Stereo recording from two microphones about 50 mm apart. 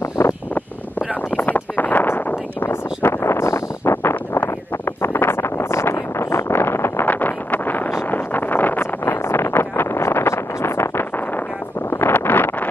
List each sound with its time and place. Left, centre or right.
0.2 s vehicle: left
1.3 s a sound: left
3.1 s wind noise: left
7.1 s wind noise: left
8.1 s vehicle: left
9.0 s vehicle: left
12.1 s vehicle: left